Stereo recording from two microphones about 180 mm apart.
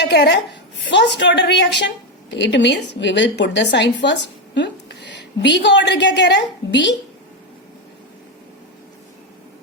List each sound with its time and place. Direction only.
0.0 s a woman's voice: 70° left (ahead or behind)